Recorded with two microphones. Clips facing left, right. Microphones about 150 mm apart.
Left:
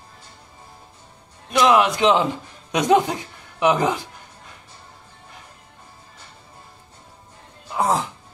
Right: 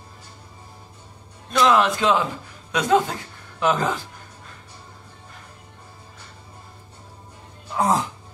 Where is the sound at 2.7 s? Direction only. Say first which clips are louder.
Left 2 dB; 20° left (ahead or behind).